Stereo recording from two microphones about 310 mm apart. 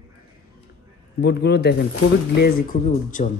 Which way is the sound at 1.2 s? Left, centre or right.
Left.